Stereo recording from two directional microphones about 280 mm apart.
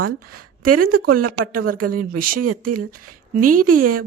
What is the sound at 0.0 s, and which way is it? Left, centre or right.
Speech, right.